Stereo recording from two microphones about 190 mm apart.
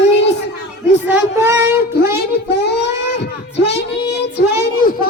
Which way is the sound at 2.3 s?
60° left (ahead or behind).